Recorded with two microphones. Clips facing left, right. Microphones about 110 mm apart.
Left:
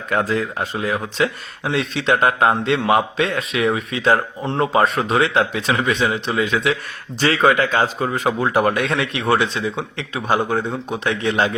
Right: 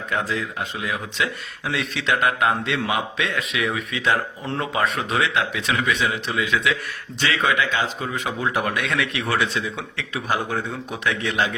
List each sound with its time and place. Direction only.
0.1 s speech: 50° left (ahead or behind)
8.4 s speech: 30° left (ahead or behind)